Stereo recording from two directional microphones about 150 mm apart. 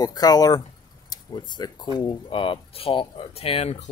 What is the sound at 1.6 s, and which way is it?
Speech, 30° left (ahead or behind).